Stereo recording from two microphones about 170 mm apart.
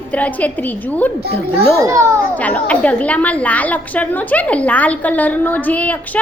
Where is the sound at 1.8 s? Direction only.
20° right (ahead or behind).